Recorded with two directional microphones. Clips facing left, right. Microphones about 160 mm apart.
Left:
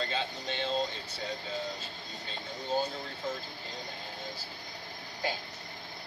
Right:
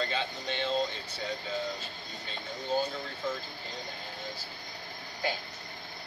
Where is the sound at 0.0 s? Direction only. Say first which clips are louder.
Right 1 dB; 35° left (ahead or behind).